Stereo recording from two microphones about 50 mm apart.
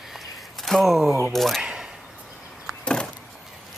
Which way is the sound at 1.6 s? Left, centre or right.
Centre.